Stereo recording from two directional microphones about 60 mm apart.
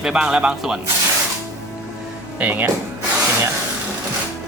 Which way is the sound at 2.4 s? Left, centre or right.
Right.